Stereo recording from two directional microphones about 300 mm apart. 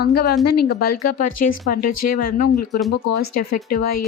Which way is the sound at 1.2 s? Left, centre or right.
Left.